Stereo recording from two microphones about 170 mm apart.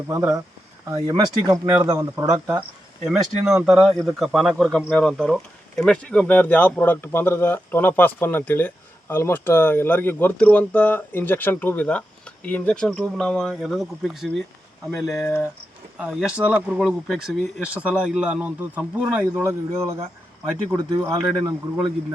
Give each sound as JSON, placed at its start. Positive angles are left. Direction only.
{"t": 0.1, "sound": "speech", "side_deg": -20}
{"t": 2.5, "sound": "speech", "side_deg": -5}